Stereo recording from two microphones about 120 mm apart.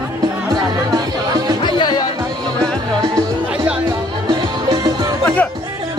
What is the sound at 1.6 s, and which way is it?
Music, 40° left (ahead or behind).